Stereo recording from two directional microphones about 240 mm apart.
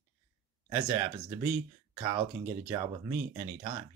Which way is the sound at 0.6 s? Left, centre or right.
Centre.